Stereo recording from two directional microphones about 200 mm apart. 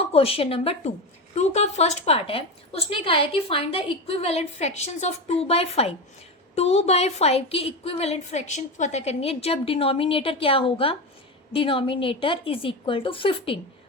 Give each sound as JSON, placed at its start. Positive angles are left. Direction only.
{"t": 0.1, "sound": "a woman's voice", "side_deg": 30}